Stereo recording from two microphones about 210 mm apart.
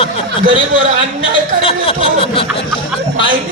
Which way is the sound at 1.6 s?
25° left (ahead or behind).